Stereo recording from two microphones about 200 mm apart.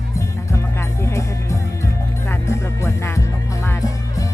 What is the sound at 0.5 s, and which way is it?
Music, 15° left (ahead or behind).